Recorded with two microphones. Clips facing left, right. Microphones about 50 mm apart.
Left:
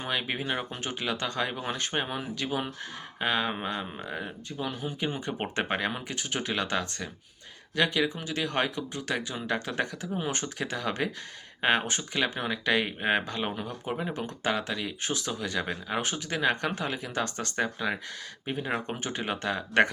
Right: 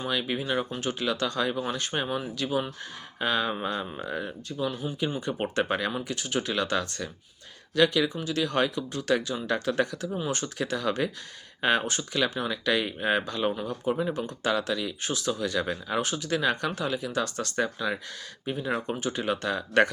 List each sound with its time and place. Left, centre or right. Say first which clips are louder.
0.1 s speech: right 1 dB; left
3.2 s speech: right 1 dB; centre
4.5 s speech: right 3 dB; left
5.2 s speech: right 3 dB; left